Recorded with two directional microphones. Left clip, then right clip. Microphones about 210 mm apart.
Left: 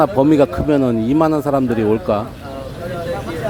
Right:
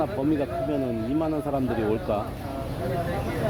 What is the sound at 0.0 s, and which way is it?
Speech, 40° left (ahead or behind).